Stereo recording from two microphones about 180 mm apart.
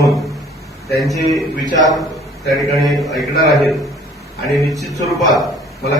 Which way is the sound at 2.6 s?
Centre (ahead or behind).